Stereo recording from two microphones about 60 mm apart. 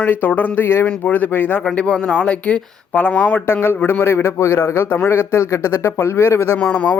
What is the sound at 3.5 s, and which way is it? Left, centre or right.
A man's voice, left.